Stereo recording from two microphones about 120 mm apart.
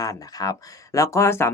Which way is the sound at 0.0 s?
30° left (ahead or behind).